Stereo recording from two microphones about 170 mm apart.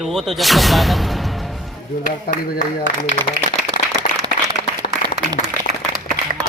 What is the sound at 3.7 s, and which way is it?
Applause, 25° right (ahead or behind).